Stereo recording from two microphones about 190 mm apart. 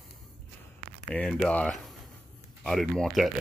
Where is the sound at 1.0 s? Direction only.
5° left (ahead or behind).